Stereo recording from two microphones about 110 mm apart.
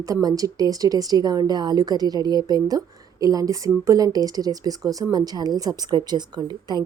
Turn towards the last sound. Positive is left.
turn(degrees=-40)  # may be behind; listen again after turning